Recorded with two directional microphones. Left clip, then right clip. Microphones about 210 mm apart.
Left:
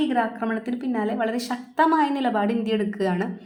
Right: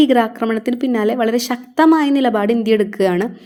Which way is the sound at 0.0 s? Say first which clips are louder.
Right 9 dB; 35° right (ahead or behind).